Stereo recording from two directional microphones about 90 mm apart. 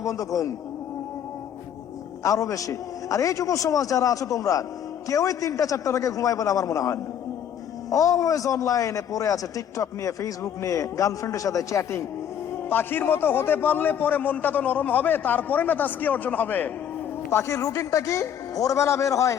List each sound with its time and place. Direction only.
0.0 s a man's voice: 35° left (ahead or behind)
2.2 s a man's voice: 40° left (ahead or behind)